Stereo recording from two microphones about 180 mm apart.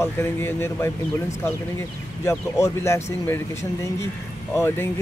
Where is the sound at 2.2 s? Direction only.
15° left (ahead or behind).